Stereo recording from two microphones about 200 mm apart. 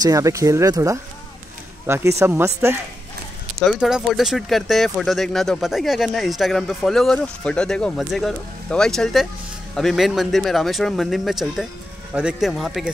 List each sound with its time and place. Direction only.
0.0 s speech: 15° right (ahead or behind)
3.6 s speech: centre (ahead or behind)